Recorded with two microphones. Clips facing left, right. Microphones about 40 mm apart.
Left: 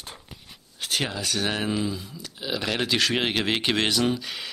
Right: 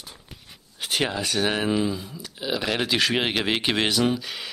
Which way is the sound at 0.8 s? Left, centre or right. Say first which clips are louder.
Right 3 dB; centre.